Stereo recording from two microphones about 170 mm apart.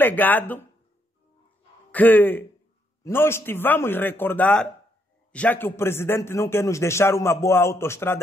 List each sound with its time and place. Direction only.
0.0 s a man's voice: 10° left (ahead or behind)
1.9 s a man's voice: 10° left (ahead or behind)